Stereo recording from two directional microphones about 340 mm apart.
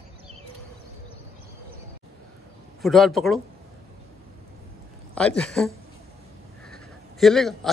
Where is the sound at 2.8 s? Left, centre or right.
Centre.